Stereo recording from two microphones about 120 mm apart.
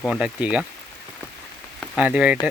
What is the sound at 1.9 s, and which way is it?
Speech, 10° right (ahead or behind).